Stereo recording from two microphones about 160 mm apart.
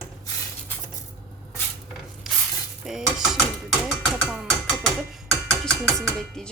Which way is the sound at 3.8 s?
Centre (ahead or behind).